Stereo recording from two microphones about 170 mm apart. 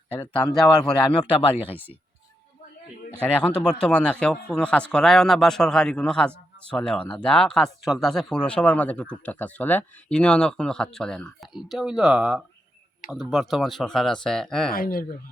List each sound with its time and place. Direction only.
0.1 s speech: 10° left (ahead or behind)
1.1 s speech: 30° left (ahead or behind)
1.7 s speech: 10° right (ahead or behind)
3.2 s speech: 5° left (ahead or behind)
14.7 s speech: 60° left (ahead or behind)